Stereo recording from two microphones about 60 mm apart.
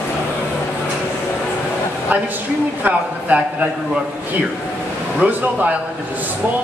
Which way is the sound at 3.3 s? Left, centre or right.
Right.